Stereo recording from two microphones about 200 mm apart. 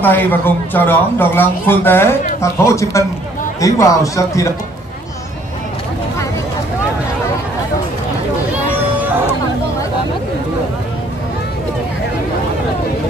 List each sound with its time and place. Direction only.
0.0 s a man's voice: 10° left (ahead or behind)